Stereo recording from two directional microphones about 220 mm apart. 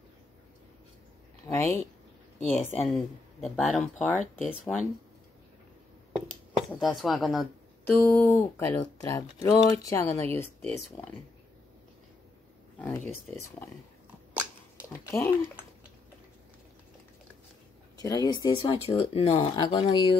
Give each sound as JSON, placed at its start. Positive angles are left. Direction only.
{"t": 1.4, "sound": "speech", "side_deg": 10}
{"t": 6.5, "sound": "speech", "side_deg": 0}
{"t": 12.7, "sound": "speech", "side_deg": 5}
{"t": 14.9, "sound": "speech", "side_deg": 10}
{"t": 18.0, "sound": "speech", "side_deg": 20}